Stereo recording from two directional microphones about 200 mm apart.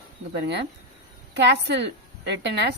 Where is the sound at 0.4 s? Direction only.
60° right (ahead or behind).